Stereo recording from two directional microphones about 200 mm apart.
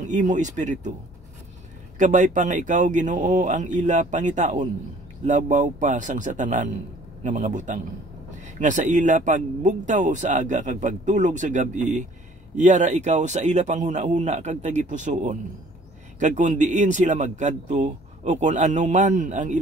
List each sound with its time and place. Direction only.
0.0 s speech: 40° right (ahead or behind)
2.0 s speech: 40° right (ahead or behind)